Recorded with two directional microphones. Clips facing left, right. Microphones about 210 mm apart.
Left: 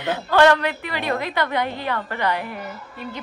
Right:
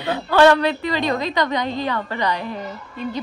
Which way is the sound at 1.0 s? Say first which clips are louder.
Even; 15° right (ahead or behind).